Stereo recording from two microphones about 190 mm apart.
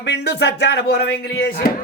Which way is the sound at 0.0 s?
60° left (ahead or behind).